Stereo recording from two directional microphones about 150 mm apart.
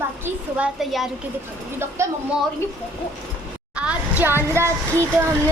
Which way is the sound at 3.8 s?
10° right (ahead or behind).